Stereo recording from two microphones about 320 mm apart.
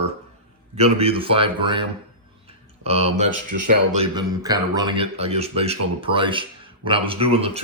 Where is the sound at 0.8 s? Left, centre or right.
Centre.